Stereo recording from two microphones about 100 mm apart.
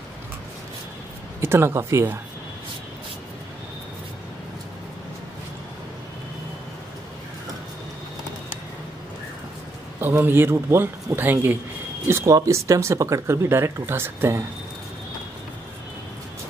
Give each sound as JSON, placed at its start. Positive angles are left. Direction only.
{"t": 1.4, "sound": "speech", "side_deg": -25}
{"t": 9.9, "sound": "speech", "side_deg": -25}